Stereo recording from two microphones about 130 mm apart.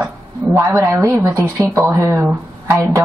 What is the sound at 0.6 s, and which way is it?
A woman's voice, 25° right (ahead or behind).